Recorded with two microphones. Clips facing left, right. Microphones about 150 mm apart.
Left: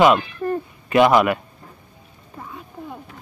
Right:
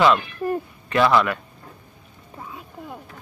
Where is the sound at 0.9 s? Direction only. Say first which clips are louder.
Left 4 dB; 20° left (ahead or behind).